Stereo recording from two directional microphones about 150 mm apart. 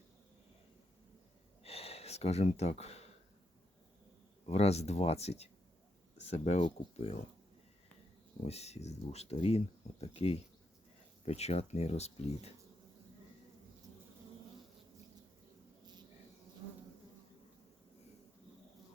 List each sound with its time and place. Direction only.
1.6 s a sound: 40° left (ahead or behind)
4.4 s speech: 45° left (ahead or behind)
8.4 s speech: 45° left (ahead or behind)